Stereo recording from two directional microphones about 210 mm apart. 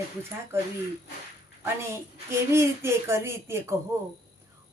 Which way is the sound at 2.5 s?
10° right (ahead or behind).